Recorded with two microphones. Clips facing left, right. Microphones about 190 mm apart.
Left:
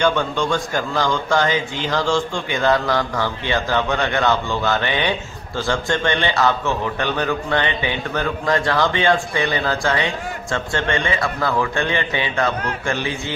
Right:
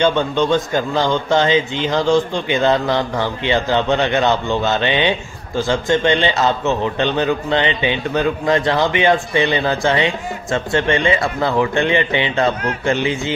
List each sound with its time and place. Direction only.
0.0 s a man's voice: 20° right (ahead or behind)